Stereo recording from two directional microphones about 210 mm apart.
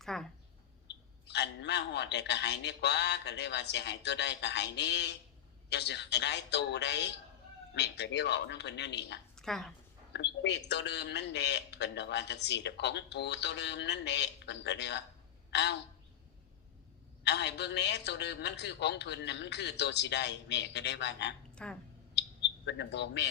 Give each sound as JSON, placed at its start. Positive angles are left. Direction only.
{"t": 0.0, "sound": "speech", "side_deg": 0}
{"t": 1.3, "sound": "a man's voice", "side_deg": 55}
{"t": 9.3, "sound": "a sound", "side_deg": 0}
{"t": 10.1, "sound": "a man's voice", "side_deg": 55}
{"t": 17.2, "sound": "a man's voice", "side_deg": 55}
{"t": 21.5, "sound": "a sound", "side_deg": 5}
{"t": 22.1, "sound": "bird", "side_deg": 55}